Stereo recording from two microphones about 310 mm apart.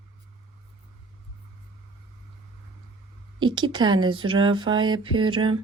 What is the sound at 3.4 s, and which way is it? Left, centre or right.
Speech, centre.